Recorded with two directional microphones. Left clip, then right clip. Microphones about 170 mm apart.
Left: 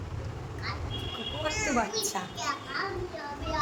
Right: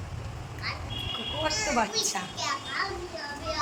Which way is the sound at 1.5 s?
60° right (ahead or behind).